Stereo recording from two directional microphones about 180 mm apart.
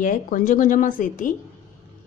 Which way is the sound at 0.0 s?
45° left (ahead or behind).